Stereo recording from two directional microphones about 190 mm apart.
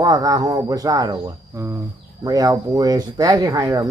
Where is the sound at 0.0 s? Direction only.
20° right (ahead or behind).